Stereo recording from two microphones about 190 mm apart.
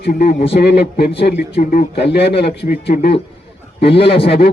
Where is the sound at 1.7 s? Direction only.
60° left (ahead or behind).